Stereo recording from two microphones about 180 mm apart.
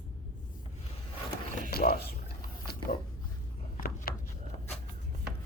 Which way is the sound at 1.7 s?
60° left (ahead or behind).